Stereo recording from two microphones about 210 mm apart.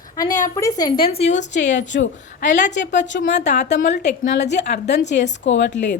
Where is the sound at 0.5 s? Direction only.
15° left (ahead or behind).